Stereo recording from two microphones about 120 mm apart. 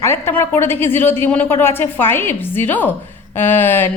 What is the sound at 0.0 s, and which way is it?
A woman's voice, 20° left (ahead or behind).